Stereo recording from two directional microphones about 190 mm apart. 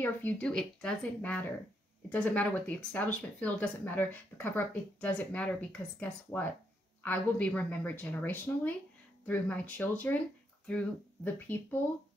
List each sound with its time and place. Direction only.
0.0 s speech: 10° left (ahead or behind)